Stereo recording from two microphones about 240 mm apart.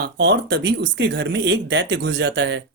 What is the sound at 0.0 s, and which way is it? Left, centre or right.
Speech, right.